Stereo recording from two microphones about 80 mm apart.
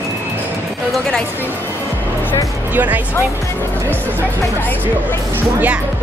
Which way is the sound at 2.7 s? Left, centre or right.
Right.